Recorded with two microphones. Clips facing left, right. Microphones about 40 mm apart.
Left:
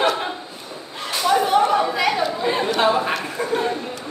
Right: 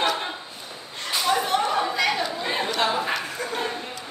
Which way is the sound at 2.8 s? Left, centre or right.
Left.